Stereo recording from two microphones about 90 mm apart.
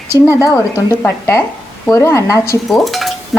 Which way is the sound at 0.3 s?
35° left (ahead or behind).